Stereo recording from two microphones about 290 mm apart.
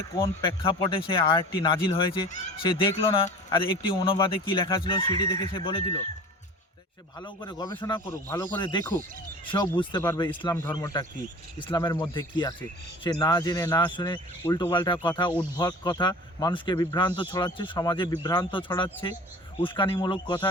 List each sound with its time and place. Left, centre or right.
0.2 s speech: centre
7.2 s speech: centre